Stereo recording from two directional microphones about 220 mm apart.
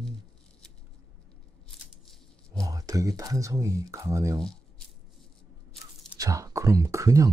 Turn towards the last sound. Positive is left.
turn(degrees=-15)  # may be behind; listen again after turning